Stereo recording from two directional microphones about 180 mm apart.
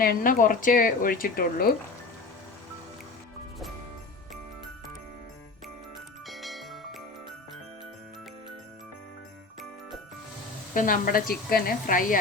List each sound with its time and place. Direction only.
0.0 s speech: 55° left (ahead or behind)
6.2 s music: centre (ahead or behind)
10.8 s speech: 50° left (ahead or behind)